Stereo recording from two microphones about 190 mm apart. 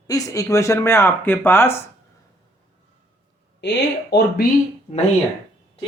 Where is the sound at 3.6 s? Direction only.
65° left (ahead or behind).